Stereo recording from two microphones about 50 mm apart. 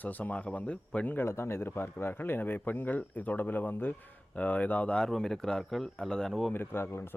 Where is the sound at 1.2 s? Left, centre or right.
Left.